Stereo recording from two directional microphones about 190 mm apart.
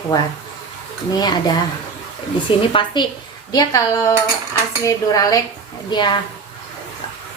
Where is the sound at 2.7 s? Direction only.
25° left (ahead or behind).